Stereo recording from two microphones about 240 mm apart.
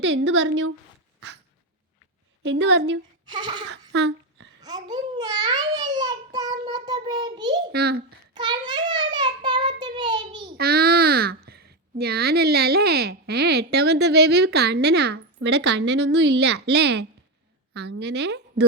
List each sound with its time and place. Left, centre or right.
0.0 s speech: right
2.4 s speech: right
3.2 s a sound: centre
3.7 s a sound: right
4.6 s babbling: centre
7.7 s a child's voice: right
8.3 s child singing: centre
10.6 s speech: right